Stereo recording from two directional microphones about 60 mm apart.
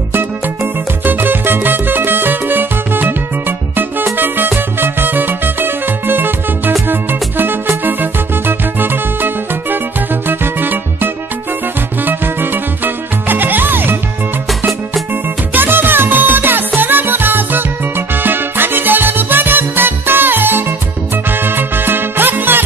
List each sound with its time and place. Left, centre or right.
1.0 s music: right
15.5 s music: right